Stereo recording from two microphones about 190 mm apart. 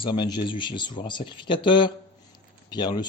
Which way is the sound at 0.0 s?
25° left (ahead or behind).